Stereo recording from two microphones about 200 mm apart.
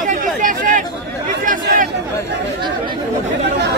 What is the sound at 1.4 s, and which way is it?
Chatter, 40° right (ahead or behind).